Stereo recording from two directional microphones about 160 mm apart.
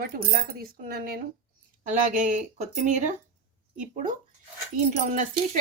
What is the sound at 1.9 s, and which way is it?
Speech, 55° right (ahead or behind).